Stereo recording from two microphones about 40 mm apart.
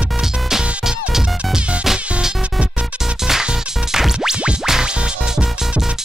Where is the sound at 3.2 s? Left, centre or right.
Centre.